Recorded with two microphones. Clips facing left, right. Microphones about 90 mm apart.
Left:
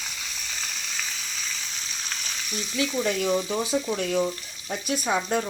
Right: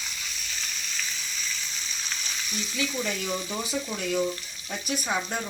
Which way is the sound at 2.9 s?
35° left (ahead or behind).